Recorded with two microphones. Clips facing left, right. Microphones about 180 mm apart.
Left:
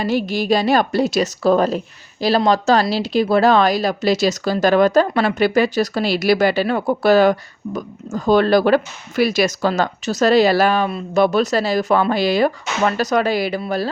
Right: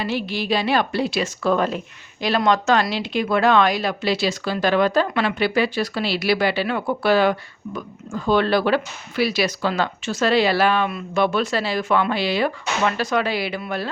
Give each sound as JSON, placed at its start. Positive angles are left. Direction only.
{"t": 0.0, "sound": "a woman's voice", "side_deg": 45}